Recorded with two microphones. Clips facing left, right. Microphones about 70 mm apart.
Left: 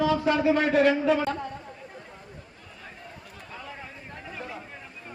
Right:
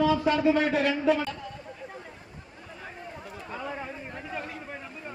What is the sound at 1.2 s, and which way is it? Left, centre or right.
Speech, left.